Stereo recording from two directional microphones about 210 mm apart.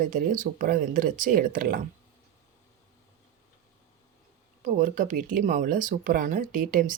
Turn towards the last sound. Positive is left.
turn(degrees=-40)  # may be behind; listen again after turning